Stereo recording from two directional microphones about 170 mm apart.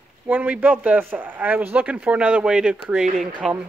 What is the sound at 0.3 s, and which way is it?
Speech, 10° right (ahead or behind).